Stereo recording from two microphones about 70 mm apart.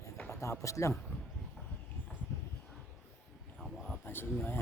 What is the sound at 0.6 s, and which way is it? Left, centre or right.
Speech, left.